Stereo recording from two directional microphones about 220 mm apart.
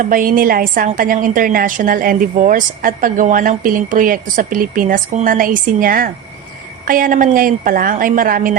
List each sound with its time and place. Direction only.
0.0 s a woman's voice: 40° right (ahead or behind)